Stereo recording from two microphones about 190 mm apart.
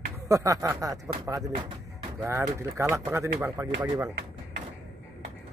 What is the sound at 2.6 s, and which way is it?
Speech, 15° right (ahead or behind).